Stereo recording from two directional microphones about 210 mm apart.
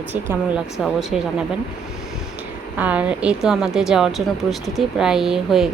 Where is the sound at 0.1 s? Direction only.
5° right (ahead or behind).